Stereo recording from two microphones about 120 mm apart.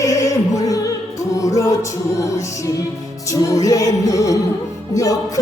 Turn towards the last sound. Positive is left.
turn(degrees=30)  # may be behind; listen again after turning